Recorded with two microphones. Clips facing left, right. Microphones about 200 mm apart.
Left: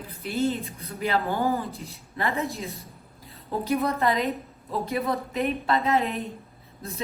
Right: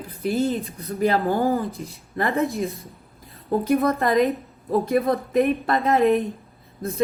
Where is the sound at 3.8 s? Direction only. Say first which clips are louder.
Right 5 dB; 50° right (ahead or behind).